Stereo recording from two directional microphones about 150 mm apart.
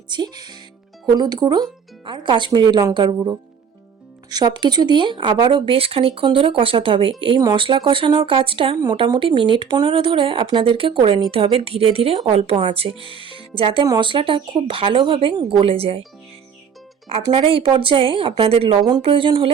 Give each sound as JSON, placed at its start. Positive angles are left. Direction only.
{"t": 0.1, "sound": "speech", "side_deg": -30}
{"t": 4.3, "sound": "speech", "side_deg": -30}
{"t": 17.1, "sound": "speech", "side_deg": -40}